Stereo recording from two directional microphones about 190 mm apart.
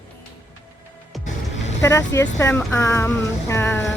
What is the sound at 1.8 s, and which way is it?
Speech, 15° left (ahead or behind).